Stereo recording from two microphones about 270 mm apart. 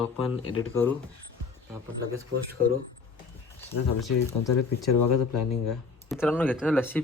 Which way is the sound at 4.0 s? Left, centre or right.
Centre.